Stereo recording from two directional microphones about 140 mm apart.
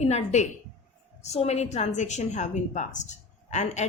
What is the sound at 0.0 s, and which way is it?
A woman's voice, 55° left (ahead or behind).